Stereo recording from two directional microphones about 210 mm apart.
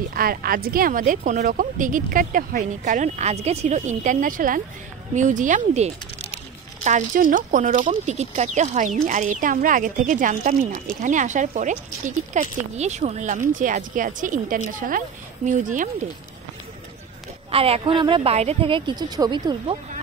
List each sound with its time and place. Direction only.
0.1 s speech: 45° right (ahead or behind)
17.5 s speech: 30° right (ahead or behind)